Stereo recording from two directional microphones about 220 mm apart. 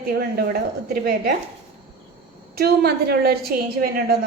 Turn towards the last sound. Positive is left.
turn(degrees=-45)  # may be behind; listen again after turning